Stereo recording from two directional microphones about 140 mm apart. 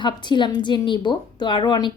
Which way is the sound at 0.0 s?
35° left (ahead or behind).